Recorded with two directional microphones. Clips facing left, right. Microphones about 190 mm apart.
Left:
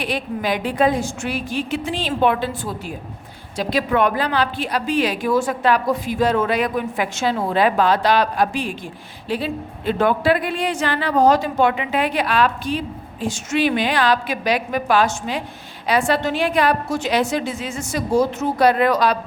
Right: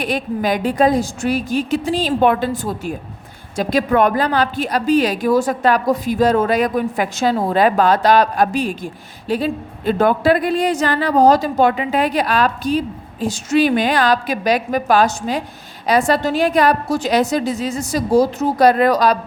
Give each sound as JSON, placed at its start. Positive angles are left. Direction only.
{"t": 0.0, "sound": "a woman's voice", "side_deg": -45}